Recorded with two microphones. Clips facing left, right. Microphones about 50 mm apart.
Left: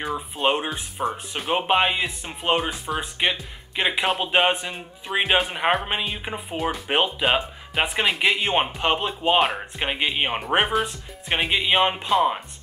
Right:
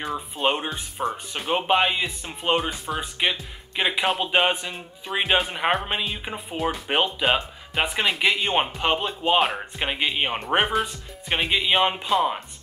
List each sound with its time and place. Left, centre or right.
0.0 s speech: centre